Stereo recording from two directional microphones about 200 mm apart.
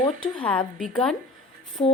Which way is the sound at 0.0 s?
5° left (ahead or behind).